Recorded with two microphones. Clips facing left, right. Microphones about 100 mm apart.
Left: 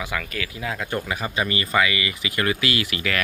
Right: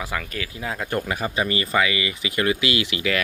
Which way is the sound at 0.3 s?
30° right (ahead or behind).